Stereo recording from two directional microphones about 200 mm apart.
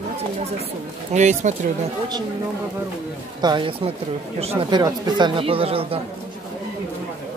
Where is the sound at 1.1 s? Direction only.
35° right (ahead or behind).